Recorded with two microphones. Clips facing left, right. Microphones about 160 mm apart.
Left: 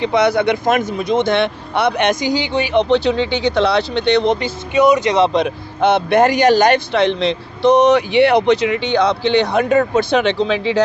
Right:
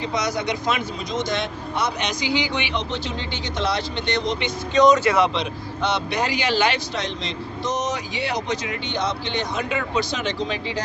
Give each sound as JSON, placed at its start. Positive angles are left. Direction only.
{"t": 0.0, "sound": "speech", "side_deg": 65}
{"t": 2.4, "sound": "speech", "side_deg": 35}
{"t": 2.7, "sound": "speech", "side_deg": 70}
{"t": 4.7, "sound": "speech", "side_deg": 10}
{"t": 5.3, "sound": "speech", "side_deg": 50}
{"t": 9.6, "sound": "speech", "side_deg": 45}